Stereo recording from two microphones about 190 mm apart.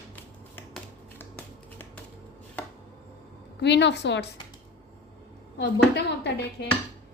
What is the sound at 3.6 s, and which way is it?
Speech, 65° left (ahead or behind).